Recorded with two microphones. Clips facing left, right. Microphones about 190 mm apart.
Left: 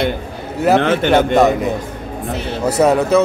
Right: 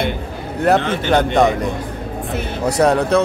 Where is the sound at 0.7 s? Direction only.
60° left (ahead or behind).